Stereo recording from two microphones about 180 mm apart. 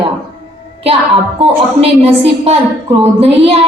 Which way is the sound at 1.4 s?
35° right (ahead or behind).